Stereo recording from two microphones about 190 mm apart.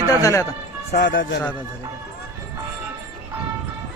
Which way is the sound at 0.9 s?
65° left (ahead or behind).